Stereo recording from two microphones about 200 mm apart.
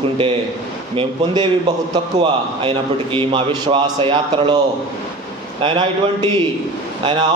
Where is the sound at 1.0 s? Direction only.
25° right (ahead or behind).